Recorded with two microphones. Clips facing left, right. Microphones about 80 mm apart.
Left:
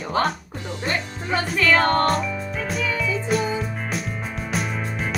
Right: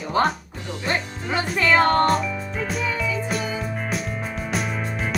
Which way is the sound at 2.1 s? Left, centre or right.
Centre.